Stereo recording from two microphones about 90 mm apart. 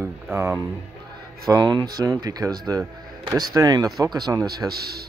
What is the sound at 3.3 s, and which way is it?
Speech, 45° right (ahead or behind).